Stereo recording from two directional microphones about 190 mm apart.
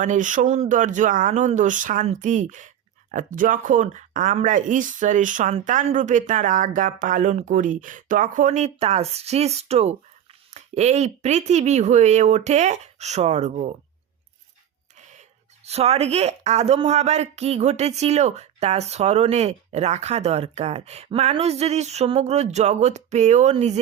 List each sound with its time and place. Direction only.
0.0 s speech: 40° right (ahead or behind)
15.6 s speech: 35° right (ahead or behind)